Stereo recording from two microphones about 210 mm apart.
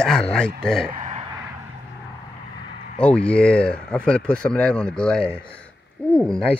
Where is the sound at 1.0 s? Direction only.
35° right (ahead or behind).